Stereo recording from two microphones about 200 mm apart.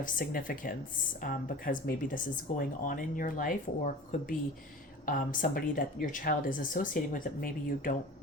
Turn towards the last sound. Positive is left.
turn(degrees=45)  # may be behind; listen again after turning